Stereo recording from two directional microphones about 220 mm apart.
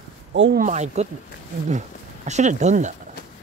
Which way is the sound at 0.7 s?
30° right (ahead or behind).